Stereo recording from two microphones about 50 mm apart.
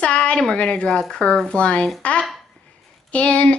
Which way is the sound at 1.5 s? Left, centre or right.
Left.